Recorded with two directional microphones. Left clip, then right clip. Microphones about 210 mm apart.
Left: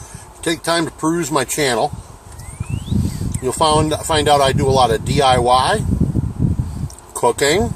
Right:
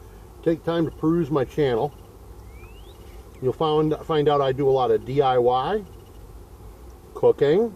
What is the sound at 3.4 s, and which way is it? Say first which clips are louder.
Speech: left 6 dB; 15° left (ahead or behind).